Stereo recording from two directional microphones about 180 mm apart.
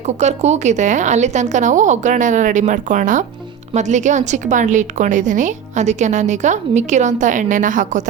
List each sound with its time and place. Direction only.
0.2 s a woman's voice: 40° right (ahead or behind)